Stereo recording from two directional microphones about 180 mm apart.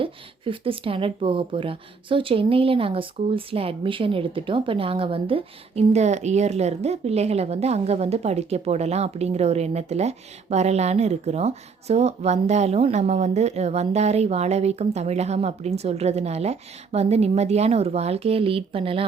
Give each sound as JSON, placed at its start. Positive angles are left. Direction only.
{"t": 0.0, "sound": "speech", "side_deg": -30}